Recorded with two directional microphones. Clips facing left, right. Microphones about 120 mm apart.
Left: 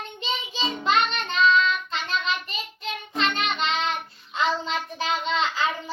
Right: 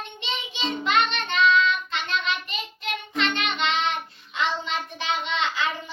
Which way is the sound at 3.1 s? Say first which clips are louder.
Left 1 dB; 35° left (ahead or behind).